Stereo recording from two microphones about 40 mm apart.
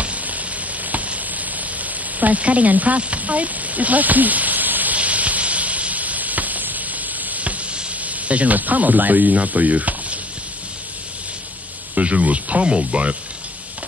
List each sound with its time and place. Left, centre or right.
0.0 s frying: right
0.9 s a sound: right
2.1 s speech: right
4.9 s sizzle: right
7.2 s frying: right
8.0 s speech: right
11.9 s speech: right